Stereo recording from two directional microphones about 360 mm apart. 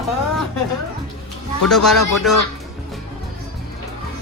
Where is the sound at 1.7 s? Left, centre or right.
Centre.